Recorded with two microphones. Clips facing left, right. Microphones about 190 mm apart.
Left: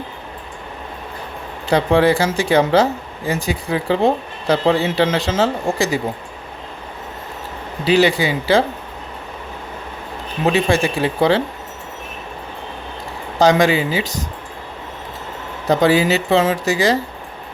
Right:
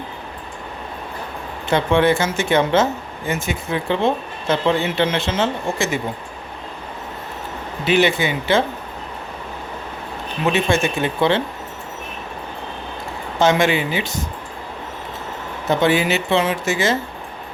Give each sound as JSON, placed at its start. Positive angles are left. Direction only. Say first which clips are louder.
{"t": 1.6, "sound": "speech", "louder": "left 2 dB", "side_deg": 35}
{"t": 7.9, "sound": "speech", "louder": "left 2 dB", "side_deg": 35}
{"t": 10.4, "sound": "speech", "louder": "left 2 dB", "side_deg": 30}
{"t": 13.4, "sound": "speech", "louder": "left 3 dB", "side_deg": 35}
{"t": 15.7, "sound": "speech", "louder": "left 3 dB", "side_deg": 35}